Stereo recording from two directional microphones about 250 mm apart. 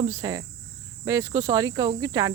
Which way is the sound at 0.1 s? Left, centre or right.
Centre.